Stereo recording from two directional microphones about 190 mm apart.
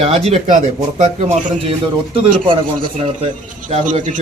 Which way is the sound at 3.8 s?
40° right (ahead or behind).